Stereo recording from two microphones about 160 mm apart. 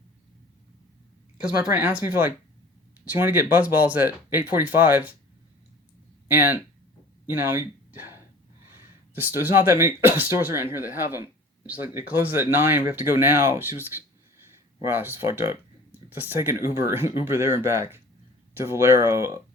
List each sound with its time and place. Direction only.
1.5 s speech: 10° right (ahead or behind)
6.2 s speech: 10° right (ahead or behind)